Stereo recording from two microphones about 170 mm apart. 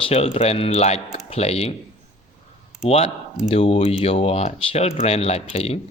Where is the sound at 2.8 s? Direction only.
40° left (ahead or behind).